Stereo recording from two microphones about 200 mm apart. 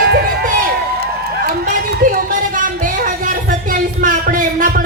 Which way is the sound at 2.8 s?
40° right (ahead or behind).